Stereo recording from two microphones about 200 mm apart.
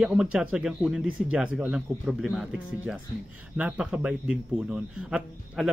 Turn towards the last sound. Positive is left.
turn(degrees=-5)  # may be behind; listen again after turning